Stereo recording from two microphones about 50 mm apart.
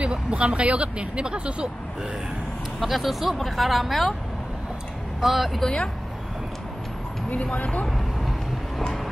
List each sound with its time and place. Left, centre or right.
0.0 s speech: right
2.8 s speech: centre
5.2 s speech: centre
5.6 s speech: centre
7.5 s speech: left